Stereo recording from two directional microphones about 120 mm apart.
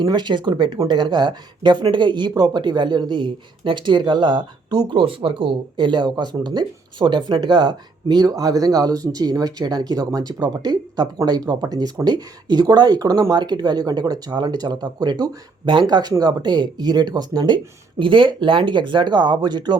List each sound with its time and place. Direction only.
0.0 s speech: 40° right (ahead or behind)